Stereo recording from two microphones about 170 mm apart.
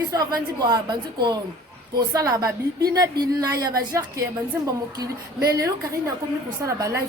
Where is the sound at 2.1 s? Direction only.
20° right (ahead or behind).